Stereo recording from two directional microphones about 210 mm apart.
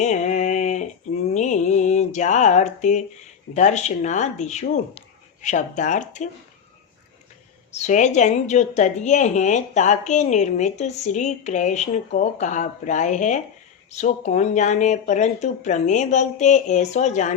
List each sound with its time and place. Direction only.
0.0 s a sound: 35° left (ahead or behind)
3.5 s a woman's voice: 35° left (ahead or behind)
7.7 s a woman's voice: 35° left (ahead or behind)